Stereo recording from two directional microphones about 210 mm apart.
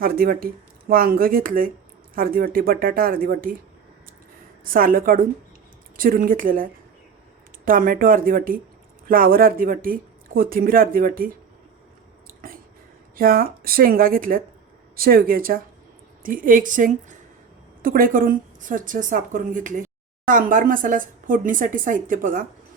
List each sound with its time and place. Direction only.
0.0 s speech: 45° right (ahead or behind)
4.7 s speech: 45° right (ahead or behind)
12.3 s a sound: 40° right (ahead or behind)
13.1 s speech: 45° right (ahead or behind)